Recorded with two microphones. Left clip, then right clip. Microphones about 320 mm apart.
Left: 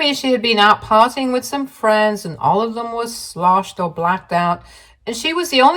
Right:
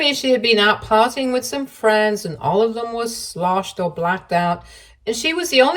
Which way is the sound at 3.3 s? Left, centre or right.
Left.